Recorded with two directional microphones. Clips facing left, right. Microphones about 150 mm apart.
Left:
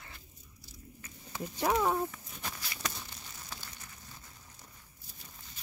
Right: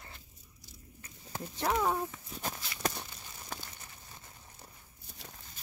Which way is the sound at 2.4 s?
45° right (ahead or behind).